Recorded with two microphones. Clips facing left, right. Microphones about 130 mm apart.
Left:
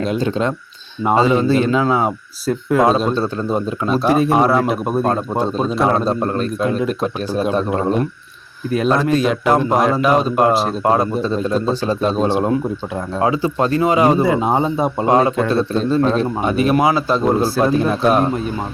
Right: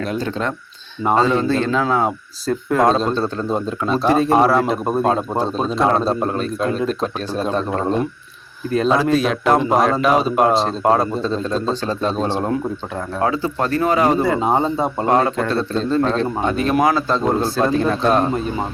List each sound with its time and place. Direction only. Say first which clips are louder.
0.0 s speech: left 4 dB; 20° left (ahead or behind)